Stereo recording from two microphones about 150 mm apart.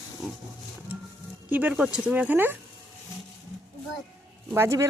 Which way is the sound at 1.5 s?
10° right (ahead or behind).